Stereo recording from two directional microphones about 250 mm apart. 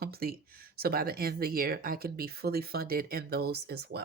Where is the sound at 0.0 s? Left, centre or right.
Right.